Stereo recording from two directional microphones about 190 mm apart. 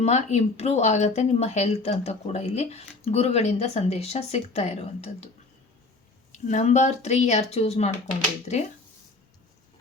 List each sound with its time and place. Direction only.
0.0 s speech: 35° left (ahead or behind)
6.3 s speech: 40° left (ahead or behind)